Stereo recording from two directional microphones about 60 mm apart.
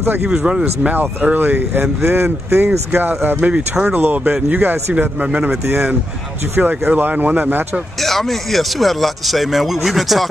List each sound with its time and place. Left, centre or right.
0.2 s speech: centre
0.8 s speech: right
2.0 s speech: right
3.3 s speech: centre
3.9 s speech: right
8.0 s speech: centre